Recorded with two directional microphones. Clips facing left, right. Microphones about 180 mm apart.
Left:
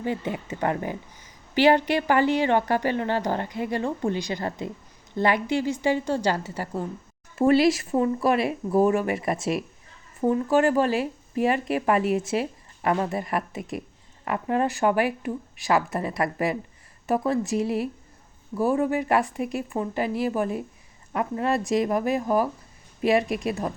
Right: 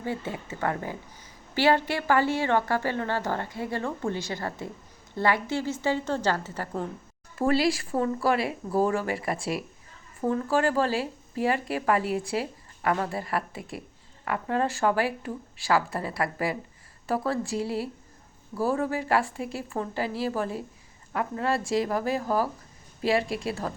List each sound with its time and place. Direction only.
0.0 s a woman's voice: 20° left (ahead or behind)
7.3 s speech: 20° left (ahead or behind)